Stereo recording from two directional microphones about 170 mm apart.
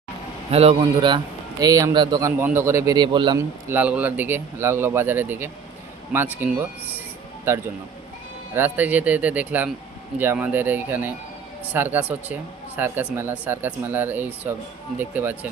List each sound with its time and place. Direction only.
0.5 s a man's voice: 35° right (ahead or behind)
3.3 s speech: 10° right (ahead or behind)